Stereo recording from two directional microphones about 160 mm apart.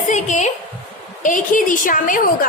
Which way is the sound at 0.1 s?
50° left (ahead or behind).